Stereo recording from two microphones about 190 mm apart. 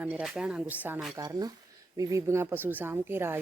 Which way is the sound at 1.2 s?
20° right (ahead or behind).